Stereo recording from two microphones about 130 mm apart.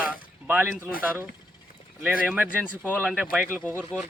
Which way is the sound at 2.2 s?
15° right (ahead or behind).